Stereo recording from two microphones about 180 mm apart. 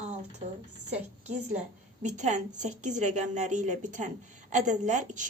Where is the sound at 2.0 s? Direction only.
40° right (ahead or behind).